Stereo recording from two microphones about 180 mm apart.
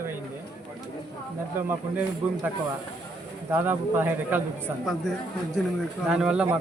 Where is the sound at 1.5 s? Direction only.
10° right (ahead or behind).